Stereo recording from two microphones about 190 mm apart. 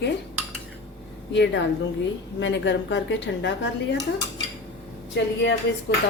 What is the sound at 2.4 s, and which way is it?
Speech, 70° left (ahead or behind).